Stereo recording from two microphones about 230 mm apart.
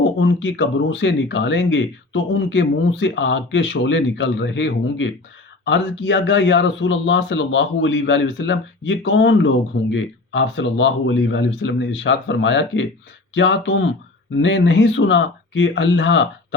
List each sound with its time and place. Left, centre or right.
0.2 s speech: left